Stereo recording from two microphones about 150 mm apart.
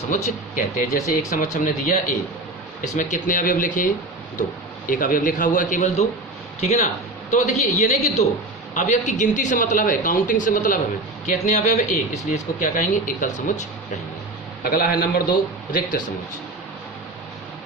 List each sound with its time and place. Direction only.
0.1 s a man's voice: 60° left (ahead or behind)
14.6 s a man's voice: 75° left (ahead or behind)